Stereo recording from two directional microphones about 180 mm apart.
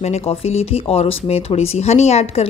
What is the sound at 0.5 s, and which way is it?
A woman's voice, 35° left (ahead or behind).